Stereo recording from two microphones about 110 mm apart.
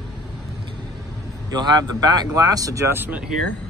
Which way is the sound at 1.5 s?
40° right (ahead or behind).